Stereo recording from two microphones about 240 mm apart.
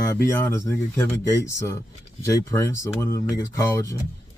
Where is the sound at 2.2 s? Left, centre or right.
Centre.